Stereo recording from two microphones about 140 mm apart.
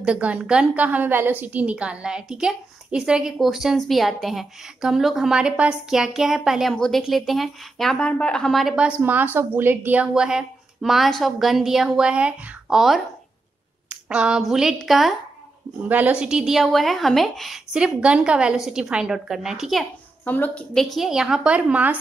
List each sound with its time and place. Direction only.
0.0 s a woman's voice: 10° right (ahead or behind)
20.2 s a woman's voice: 10° left (ahead or behind); by 21.9 s 10° right (ahead or behind)